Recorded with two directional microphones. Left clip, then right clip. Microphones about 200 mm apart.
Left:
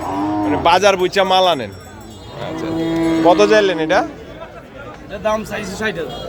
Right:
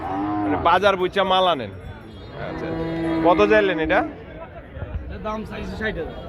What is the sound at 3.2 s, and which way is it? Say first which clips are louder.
Speech: left 4 dB; 15° left (ahead or behind).